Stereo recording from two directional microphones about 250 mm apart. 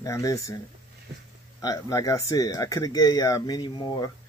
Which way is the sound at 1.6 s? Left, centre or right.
Centre.